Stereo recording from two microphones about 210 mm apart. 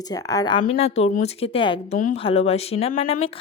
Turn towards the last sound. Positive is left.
turn(degrees=25)  # may be behind; listen again after turning